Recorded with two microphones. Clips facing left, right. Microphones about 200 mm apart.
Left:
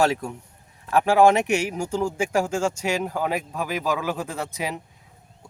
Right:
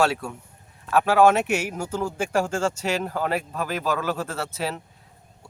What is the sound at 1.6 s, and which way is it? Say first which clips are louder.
Speech: left 3 dB; 10° left (ahead or behind).